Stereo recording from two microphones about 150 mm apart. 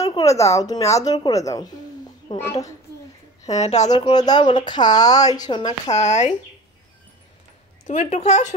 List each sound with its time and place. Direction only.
0.0 s a woman's voice: 25° left (ahead or behind)
3.5 s speech: 50° left (ahead or behind)
3.9 s a woman's voice: 25° left (ahead or behind)
5.7 s speech: 50° left (ahead or behind)
7.8 s speech: 50° left (ahead or behind)